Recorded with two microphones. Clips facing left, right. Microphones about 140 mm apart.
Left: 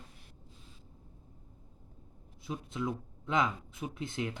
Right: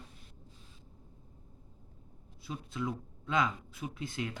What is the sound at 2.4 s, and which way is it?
Speech, 20° left (ahead or behind).